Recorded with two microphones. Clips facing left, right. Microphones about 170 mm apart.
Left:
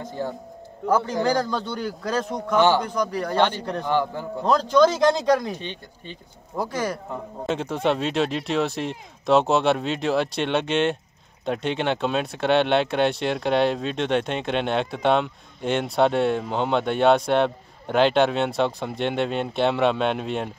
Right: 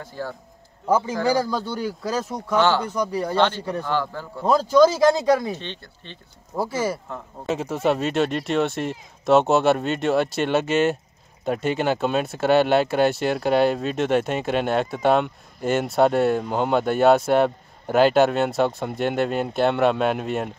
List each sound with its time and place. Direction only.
0.0 s a man's voice: 20° left (ahead or behind)
0.8 s speech: 10° right (ahead or behind)
2.5 s speech: 15° left (ahead or behind)
2.9 s speech: 10° right (ahead or behind)
3.3 s speech: 15° left (ahead or behind)
4.5 s speech: 5° right (ahead or behind)
5.6 s speech: 15° left (ahead or behind)
6.5 s speech: 5° right (ahead or behind)